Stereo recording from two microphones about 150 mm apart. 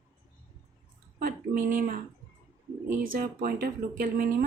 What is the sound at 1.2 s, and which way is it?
Speech, 65° right (ahead or behind).